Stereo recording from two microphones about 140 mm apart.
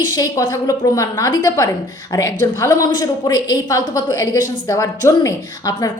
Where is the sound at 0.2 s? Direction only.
25° left (ahead or behind).